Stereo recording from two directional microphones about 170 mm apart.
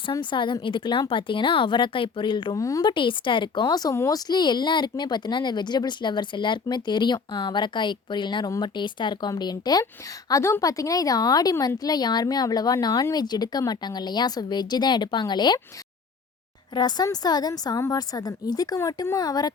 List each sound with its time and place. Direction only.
0.0 s speech: 30° left (ahead or behind)
16.7 s speech: 25° left (ahead or behind)